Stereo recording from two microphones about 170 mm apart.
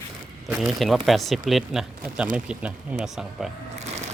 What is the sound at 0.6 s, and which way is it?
Speech, centre (ahead or behind).